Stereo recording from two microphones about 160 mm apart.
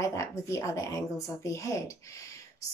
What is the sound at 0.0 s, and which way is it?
Speech, 20° left (ahead or behind).